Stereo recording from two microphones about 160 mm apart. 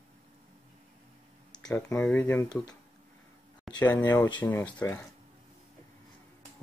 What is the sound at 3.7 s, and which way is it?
Speech, centre (ahead or behind).